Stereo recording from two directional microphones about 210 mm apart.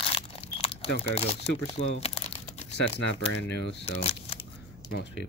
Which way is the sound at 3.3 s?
55° left (ahead or behind).